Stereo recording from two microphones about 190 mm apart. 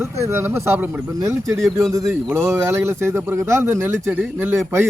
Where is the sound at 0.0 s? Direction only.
15° right (ahead or behind).